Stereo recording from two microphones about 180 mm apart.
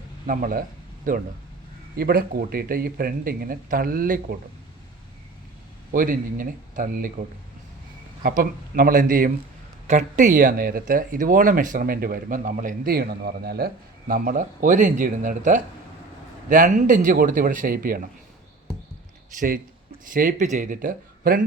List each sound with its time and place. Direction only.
0.3 s speech: 50° right (ahead or behind)
5.9 s speech: 50° right (ahead or behind)
20.1 s speech: 45° right (ahead or behind)